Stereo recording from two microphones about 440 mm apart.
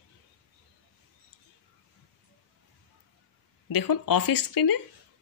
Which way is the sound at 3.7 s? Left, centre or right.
Left.